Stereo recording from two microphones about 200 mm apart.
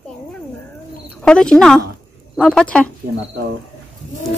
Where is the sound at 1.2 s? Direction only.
5° left (ahead or behind).